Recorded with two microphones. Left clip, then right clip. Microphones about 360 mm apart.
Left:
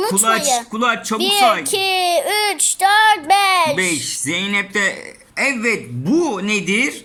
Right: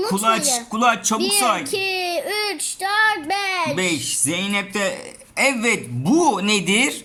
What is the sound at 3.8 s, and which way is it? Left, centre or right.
Speech, centre.